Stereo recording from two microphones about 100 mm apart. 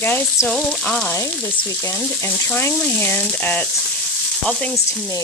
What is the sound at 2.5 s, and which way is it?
Frying, 20° left (ahead or behind).